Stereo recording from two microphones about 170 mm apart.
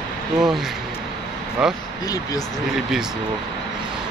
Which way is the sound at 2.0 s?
20° left (ahead or behind).